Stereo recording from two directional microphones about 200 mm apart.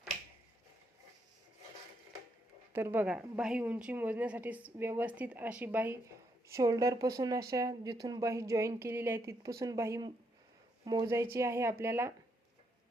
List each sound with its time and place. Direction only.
2.7 s a woman's voice: 10° right (ahead or behind)